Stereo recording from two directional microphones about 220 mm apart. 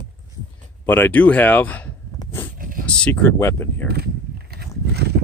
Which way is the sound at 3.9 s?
45° right (ahead or behind).